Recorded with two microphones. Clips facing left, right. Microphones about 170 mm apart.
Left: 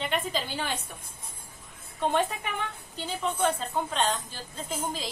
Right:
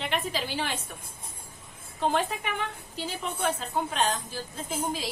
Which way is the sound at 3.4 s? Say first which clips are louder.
Even; 5° right (ahead or behind).